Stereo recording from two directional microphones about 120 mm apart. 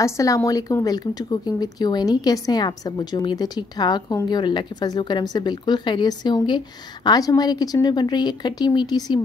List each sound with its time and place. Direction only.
0.0 s a woman's voice: 25° left (ahead or behind)